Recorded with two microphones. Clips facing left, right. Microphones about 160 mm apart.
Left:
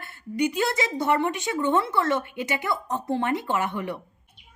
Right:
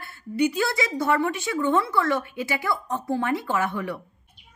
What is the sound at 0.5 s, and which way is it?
Speech, 20° left (ahead or behind).